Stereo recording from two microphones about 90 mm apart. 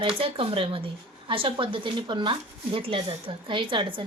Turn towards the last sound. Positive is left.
turn(degrees=-65)  # may be behind; listen again after turning